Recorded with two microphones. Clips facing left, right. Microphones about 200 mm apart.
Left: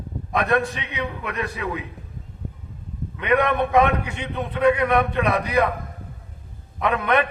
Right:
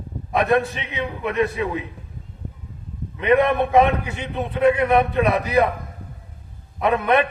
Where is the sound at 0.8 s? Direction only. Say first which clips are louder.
Right 2 dB; 25° right (ahead or behind).